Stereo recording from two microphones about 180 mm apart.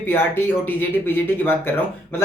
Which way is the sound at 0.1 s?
10° left (ahead or behind).